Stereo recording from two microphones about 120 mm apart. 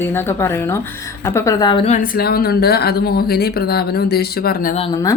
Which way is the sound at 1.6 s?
40° left (ahead or behind).